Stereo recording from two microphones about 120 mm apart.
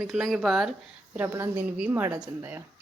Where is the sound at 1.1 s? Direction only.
20° right (ahead or behind).